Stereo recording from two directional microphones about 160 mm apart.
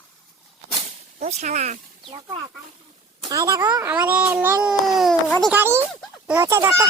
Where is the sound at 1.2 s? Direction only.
50° right (ahead or behind).